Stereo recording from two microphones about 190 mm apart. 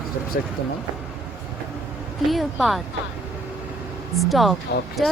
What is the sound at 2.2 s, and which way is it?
Speech, centre (ahead or behind).